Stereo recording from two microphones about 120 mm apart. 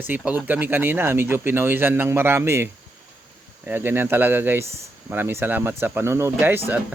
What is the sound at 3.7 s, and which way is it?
A man's voice, 15° right (ahead or behind).